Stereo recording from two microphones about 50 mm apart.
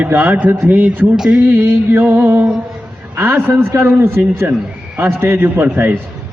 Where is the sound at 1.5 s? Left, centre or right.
Right.